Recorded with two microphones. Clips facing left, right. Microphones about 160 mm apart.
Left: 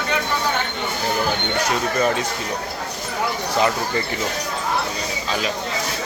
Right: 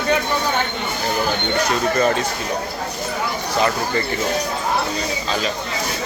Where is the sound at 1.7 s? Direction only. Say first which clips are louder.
Right 2 dB; 10° left (ahead or behind).